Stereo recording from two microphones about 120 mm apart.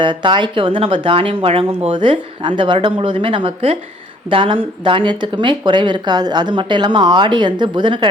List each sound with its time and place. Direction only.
0.0 s speech: 40° right (ahead or behind)